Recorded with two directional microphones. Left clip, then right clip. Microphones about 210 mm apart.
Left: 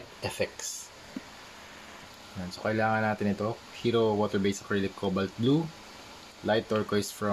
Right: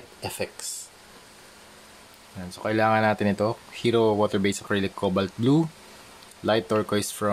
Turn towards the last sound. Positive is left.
turn(degrees=-30)  # may be behind; listen again after turning